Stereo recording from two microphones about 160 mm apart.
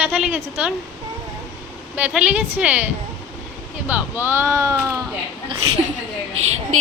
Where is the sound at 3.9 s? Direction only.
15° right (ahead or behind).